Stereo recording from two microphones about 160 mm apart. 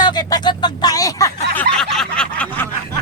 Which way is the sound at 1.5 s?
5° left (ahead or behind).